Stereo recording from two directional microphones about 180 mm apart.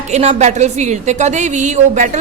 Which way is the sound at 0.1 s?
40° right (ahead or behind).